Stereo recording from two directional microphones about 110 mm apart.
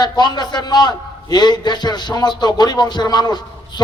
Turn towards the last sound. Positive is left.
turn(degrees=40)  # may be behind; listen again after turning